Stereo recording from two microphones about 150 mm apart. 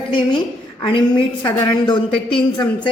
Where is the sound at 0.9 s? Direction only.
35° left (ahead or behind).